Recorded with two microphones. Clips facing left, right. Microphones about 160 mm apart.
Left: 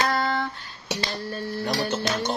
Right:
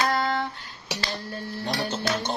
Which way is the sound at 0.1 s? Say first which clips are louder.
Even; 20° right (ahead or behind).